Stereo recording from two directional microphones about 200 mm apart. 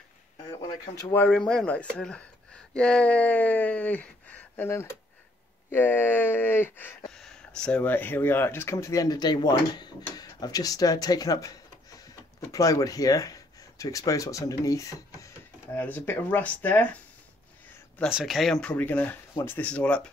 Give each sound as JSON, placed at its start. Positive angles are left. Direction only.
{"t": 0.5, "sound": "speech", "side_deg": 15}